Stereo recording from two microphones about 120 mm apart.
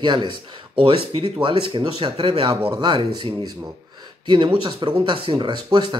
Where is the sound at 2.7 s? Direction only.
40° right (ahead or behind).